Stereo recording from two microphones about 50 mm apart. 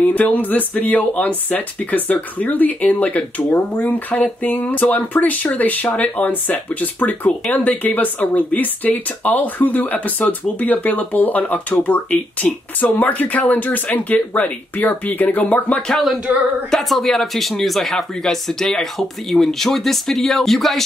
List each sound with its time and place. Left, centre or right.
0.0 s speech: left
16.3 s speech: centre
16.7 s speech: centre